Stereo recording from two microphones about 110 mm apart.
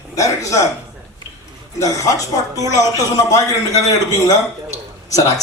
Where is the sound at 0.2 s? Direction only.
30° left (ahead or behind).